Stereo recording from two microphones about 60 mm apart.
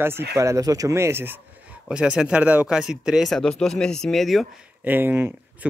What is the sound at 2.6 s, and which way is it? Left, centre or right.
Speech, centre.